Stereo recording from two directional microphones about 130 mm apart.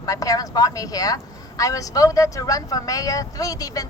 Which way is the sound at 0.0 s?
25° left (ahead or behind).